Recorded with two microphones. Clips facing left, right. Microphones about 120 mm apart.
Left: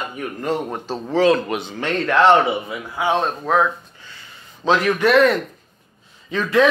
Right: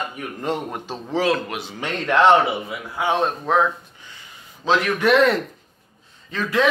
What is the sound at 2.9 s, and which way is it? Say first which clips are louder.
Speech: left 1 dB; 10° left (ahead or behind).